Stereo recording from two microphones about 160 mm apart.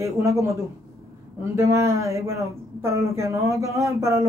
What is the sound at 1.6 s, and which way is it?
Speech, 15° right (ahead or behind).